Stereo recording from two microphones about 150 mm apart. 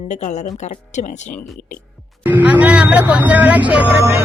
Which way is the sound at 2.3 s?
10° right (ahead or behind).